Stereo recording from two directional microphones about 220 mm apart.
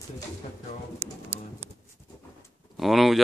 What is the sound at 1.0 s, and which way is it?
Pigeon, 30° right (ahead or behind).